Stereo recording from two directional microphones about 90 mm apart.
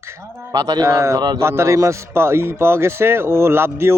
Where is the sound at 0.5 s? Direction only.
50° right (ahead or behind).